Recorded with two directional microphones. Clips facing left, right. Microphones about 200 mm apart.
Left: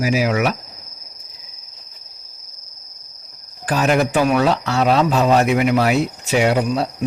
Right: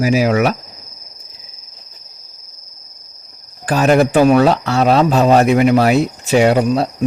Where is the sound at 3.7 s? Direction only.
40° right (ahead or behind).